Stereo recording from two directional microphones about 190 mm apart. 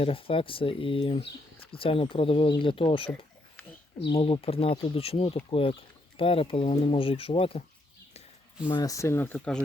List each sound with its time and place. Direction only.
0.0 s speech: 30° left (ahead or behind)
4.1 s speech: 30° left (ahead or behind)
8.6 s speech: 20° left (ahead or behind)